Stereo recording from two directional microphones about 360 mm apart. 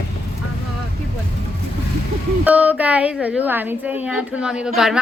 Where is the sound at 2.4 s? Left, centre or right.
Centre.